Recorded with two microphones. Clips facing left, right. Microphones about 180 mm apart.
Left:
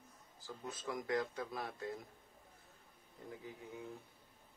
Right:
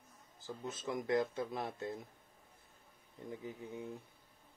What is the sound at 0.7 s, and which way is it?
Speech, 20° right (ahead or behind).